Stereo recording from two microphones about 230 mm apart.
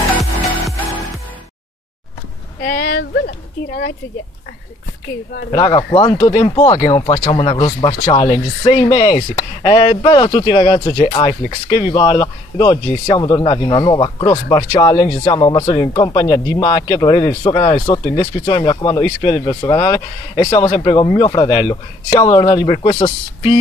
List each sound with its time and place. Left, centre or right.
0.1 s music: centre
2.6 s speech: left
5.5 s speech: centre